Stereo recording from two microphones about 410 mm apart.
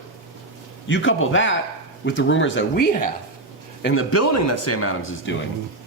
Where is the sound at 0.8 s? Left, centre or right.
Left.